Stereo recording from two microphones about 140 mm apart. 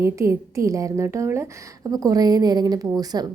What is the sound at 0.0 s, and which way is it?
A woman's voice, 20° right (ahead or behind).